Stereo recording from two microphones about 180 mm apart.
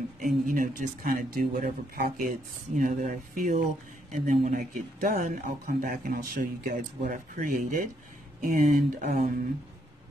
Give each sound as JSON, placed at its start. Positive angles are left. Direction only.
{"t": 0.5, "sound": "a man's voice", "side_deg": -50}